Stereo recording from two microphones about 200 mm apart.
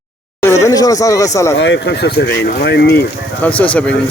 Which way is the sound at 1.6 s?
60° left (ahead or behind).